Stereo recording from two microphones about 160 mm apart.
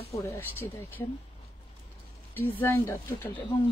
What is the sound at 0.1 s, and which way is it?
Speech, 20° left (ahead or behind).